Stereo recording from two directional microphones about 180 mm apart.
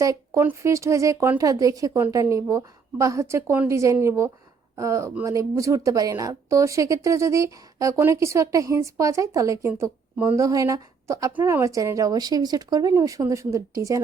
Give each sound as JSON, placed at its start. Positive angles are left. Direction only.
{"t": 0.0, "sound": "speech", "side_deg": -15}